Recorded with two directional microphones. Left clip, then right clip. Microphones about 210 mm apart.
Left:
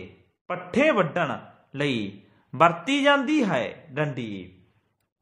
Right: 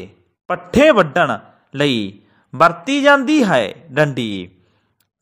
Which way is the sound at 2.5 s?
25° right (ahead or behind).